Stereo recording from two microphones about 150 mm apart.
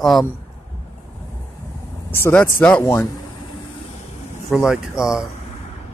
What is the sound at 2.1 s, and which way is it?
Speech, 15° left (ahead or behind).